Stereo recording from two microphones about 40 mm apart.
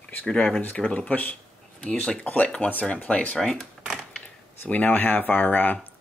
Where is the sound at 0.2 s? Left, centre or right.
Centre.